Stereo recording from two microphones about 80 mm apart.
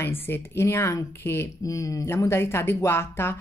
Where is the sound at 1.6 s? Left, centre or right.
Left.